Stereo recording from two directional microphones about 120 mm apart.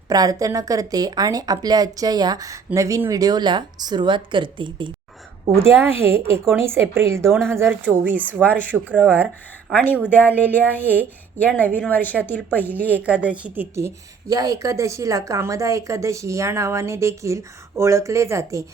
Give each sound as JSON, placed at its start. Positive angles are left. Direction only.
{"t": 0.1, "sound": "speech", "side_deg": -30}
{"t": 5.5, "sound": "a woman's voice", "side_deg": -20}
{"t": 10.1, "sound": "speech", "side_deg": 15}
{"t": 10.3, "sound": "speech", "side_deg": -15}
{"t": 11.3, "sound": "speech", "side_deg": 15}
{"t": 12.8, "sound": "a woman's voice", "side_deg": -10}